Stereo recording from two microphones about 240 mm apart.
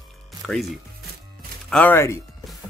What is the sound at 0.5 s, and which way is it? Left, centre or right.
Speech, centre.